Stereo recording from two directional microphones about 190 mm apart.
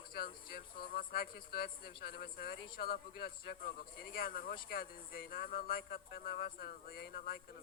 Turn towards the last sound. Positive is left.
turn(degrees=50)  # may be behind; listen again after turning